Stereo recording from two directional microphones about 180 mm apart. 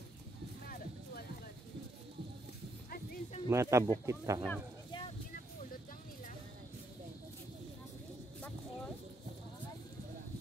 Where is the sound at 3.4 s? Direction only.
15° right (ahead or behind).